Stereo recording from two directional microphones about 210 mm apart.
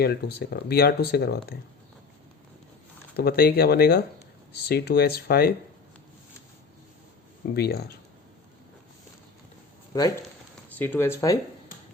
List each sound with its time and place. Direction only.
0.0 s speech: 50° left (ahead or behind)
3.2 s speech: 45° left (ahead or behind)
7.5 s speech: 50° left (ahead or behind)
10.8 s speech: 10° left (ahead or behind)